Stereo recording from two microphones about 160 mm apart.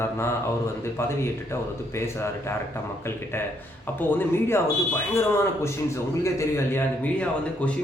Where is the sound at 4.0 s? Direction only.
10° left (ahead or behind).